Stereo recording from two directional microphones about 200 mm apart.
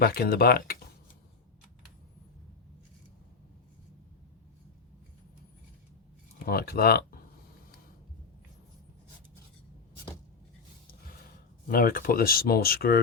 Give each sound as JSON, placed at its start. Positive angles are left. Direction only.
{"t": 0.0, "sound": "speech", "side_deg": 50}
{"t": 6.4, "sound": "speech", "side_deg": 50}
{"t": 11.7, "sound": "speech", "side_deg": 45}